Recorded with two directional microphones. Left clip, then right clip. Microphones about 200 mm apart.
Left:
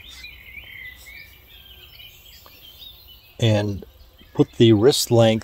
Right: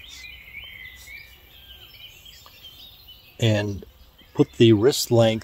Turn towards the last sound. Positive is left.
turn(degrees=35)  # may be behind; listen again after turning